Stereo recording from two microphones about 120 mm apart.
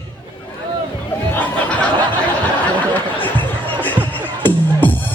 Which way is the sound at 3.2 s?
15° left (ahead or behind).